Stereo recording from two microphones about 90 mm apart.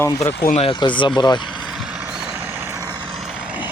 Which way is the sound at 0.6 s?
65° left (ahead or behind).